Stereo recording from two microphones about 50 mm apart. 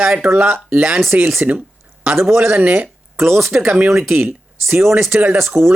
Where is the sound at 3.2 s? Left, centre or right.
Right.